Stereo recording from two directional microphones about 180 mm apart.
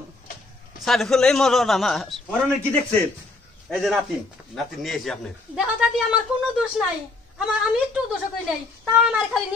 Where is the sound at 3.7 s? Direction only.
Centre (ahead or behind).